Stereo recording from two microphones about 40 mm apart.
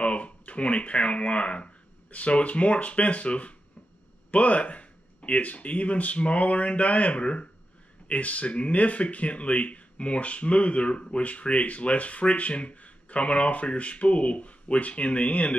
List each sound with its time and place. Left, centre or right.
0.0 s speech: left